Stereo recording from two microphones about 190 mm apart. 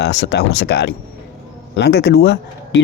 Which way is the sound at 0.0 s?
65° left (ahead or behind).